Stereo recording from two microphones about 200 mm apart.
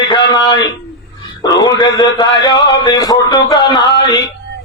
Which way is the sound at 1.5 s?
20° left (ahead or behind).